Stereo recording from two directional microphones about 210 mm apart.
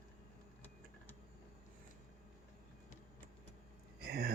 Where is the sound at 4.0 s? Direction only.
50° right (ahead or behind).